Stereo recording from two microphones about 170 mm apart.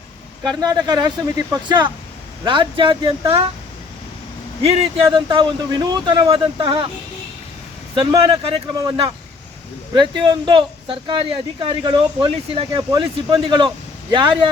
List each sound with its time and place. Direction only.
0.4 s speech: 25° right (ahead or behind)
4.6 s speech: 35° right (ahead or behind)
7.9 s speech: 30° right (ahead or behind)